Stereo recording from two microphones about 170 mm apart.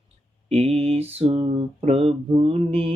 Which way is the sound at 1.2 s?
35° right (ahead or behind).